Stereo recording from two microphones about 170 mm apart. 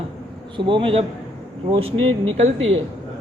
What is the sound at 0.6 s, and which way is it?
Speech, 30° right (ahead or behind).